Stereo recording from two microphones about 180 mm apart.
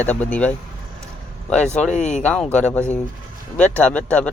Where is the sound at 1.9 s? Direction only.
40° left (ahead or behind).